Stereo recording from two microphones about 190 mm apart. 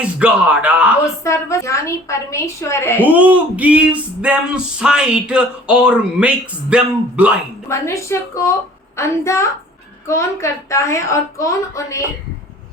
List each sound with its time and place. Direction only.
0.0 s speech: 5° right (ahead or behind)
1.2 s a woman's voice: 15° left (ahead or behind)
3.0 s a sound: 10° right (ahead or behind)
7.7 s a woman's voice: 15° left (ahead or behind)